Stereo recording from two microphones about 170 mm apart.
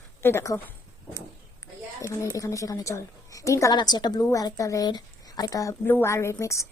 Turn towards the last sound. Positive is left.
turn(degrees=15)  # may be behind; listen again after turning